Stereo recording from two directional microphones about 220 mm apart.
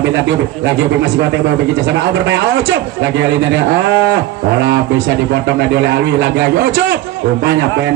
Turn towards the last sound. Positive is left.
turn(degrees=-50)  # may be behind; listen again after turning